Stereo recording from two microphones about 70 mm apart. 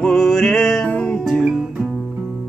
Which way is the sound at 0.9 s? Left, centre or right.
Centre.